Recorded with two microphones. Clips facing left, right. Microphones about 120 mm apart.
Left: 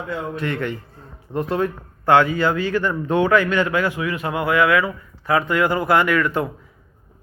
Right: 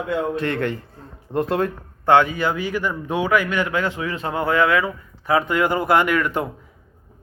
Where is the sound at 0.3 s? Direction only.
40° right (ahead or behind).